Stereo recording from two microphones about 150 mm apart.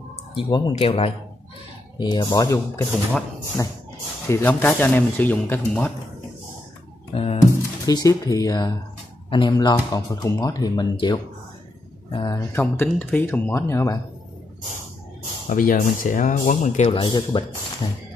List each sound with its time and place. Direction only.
0.3 s speech: 30° left (ahead or behind)
2.0 s speech: 30° left (ahead or behind); by 3.3 s 15° left (ahead or behind)
4.3 s speech: 15° left (ahead or behind)
7.1 s speech: 40° left (ahead or behind)
7.8 s speech: 25° left (ahead or behind)
12.4 s speech: 15° left (ahead or behind)
15.4 s speech: 60° left (ahead or behind)
17.0 s speech: 30° left (ahead or behind)